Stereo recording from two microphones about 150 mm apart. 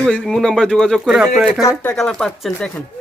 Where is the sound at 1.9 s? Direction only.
5° left (ahead or behind).